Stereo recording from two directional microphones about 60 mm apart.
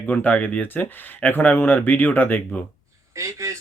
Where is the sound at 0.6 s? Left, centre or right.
Left.